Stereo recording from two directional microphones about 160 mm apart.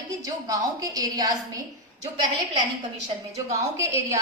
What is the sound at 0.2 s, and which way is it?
A woman's voice, 25° right (ahead or behind).